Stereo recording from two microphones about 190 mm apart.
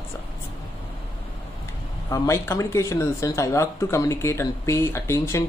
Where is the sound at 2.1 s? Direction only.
15° left (ahead or behind).